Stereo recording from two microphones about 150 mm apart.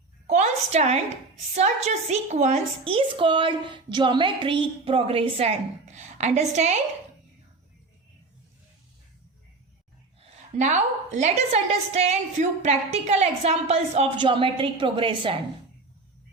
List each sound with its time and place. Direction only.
0.3 s a sound: 50° right (ahead or behind)
1.5 s a woman's voice: 50° right (ahead or behind)
10.2 s a woman's voice: 50° right (ahead or behind); by 15.4 s 35° right (ahead or behind)